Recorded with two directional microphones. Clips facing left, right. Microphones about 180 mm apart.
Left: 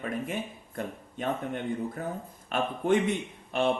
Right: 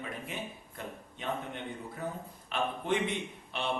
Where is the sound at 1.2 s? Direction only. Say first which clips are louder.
Left 6 dB; 45° left (ahead or behind).